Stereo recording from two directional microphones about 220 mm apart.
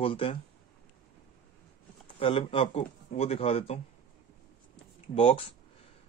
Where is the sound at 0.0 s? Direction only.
25° left (ahead or behind).